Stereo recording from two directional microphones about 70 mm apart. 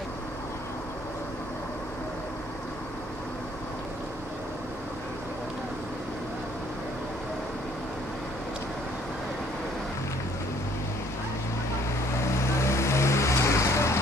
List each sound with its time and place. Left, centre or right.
12.5 s vehicle: left